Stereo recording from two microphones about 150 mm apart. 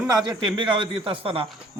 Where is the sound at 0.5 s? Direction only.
30° right (ahead or behind).